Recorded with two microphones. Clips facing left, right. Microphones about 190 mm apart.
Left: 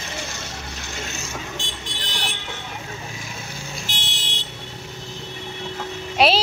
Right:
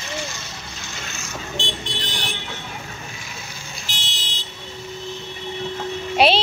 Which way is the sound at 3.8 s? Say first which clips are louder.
Left 2 dB; 60° left (ahead or behind).